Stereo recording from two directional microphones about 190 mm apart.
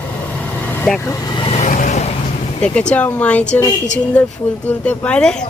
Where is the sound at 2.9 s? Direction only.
10° left (ahead or behind).